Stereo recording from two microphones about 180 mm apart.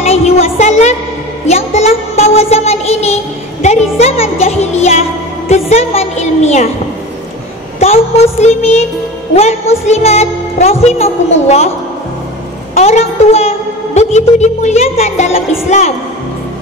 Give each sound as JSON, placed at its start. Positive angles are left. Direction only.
{"t": 0.0, "sound": "music", "side_deg": 35}
{"t": 1.4, "sound": "a woman's voice", "side_deg": 40}
{"t": 7.8, "sound": "a woman's voice", "side_deg": 35}
{"t": 12.7, "sound": "a woman's voice", "side_deg": 35}